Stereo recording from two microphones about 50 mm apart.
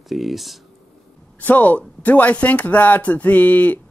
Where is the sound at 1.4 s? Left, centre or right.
Left.